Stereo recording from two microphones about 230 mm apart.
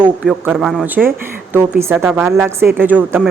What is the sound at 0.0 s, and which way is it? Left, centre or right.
A woman's voice, centre.